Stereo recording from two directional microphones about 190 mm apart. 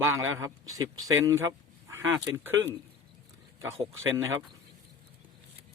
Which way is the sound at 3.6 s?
15° right (ahead or behind).